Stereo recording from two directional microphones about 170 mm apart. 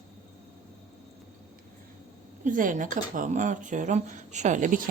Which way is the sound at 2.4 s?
50° right (ahead or behind).